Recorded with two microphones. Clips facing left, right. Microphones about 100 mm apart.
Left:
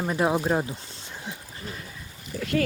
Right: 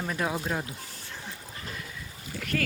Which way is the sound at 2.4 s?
30° left (ahead or behind).